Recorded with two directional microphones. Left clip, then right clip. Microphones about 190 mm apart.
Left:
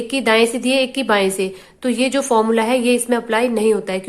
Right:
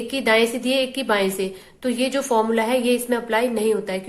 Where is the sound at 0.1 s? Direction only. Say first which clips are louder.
Left 3 dB; 30° left (ahead or behind).